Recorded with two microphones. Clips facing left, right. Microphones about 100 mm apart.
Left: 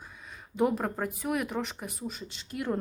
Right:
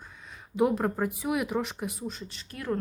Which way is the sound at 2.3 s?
20° left (ahead or behind).